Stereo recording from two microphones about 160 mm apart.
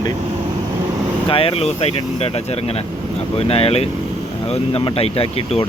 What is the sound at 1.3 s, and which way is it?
Speech, 35° left (ahead or behind).